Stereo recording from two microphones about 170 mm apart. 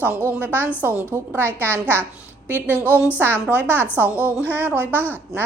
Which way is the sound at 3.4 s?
10° right (ahead or behind).